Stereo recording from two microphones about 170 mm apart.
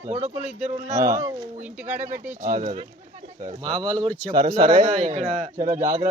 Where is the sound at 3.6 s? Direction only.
25° right (ahead or behind).